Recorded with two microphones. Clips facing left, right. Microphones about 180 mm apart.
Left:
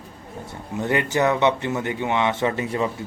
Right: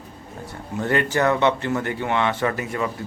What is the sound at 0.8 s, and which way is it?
Speech, 15° left (ahead or behind).